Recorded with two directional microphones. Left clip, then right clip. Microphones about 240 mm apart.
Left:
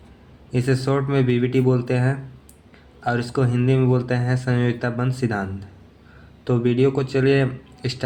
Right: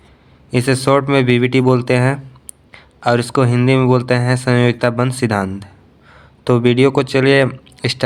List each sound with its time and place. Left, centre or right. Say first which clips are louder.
0.5 s speech: right 8 dB; right